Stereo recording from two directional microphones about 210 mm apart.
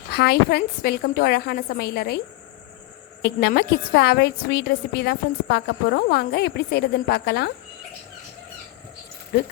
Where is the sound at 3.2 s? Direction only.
50° left (ahead or behind).